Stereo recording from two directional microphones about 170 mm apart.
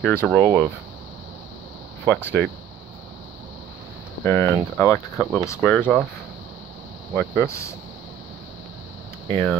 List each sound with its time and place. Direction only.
0.0 s speech: 10° left (ahead or behind)
2.0 s speech: 10° left (ahead or behind)
4.2 s speech: 15° left (ahead or behind)
7.2 s speech: 10° left (ahead or behind)
9.3 s speech: 15° left (ahead or behind)